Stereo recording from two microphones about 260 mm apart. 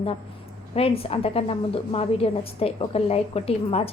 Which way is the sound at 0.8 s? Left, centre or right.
Left.